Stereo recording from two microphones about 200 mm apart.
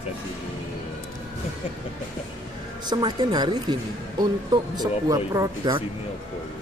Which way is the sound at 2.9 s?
20° right (ahead or behind).